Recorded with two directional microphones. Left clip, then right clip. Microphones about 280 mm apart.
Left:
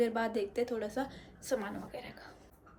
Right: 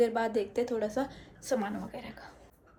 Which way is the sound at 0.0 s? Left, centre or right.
Centre.